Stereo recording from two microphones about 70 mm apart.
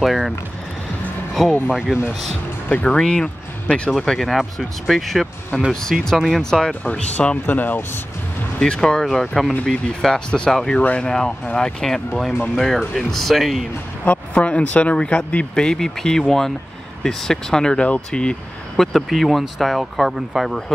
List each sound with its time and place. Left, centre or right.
0.0 s vehicle: centre
1.7 s speech: centre
2.7 s speech: centre
6.8 s speech: centre
8.5 s speech: centre
10.8 s speech: left
11.1 s speech: centre
14.0 s speech: centre
18.9 s speech: centre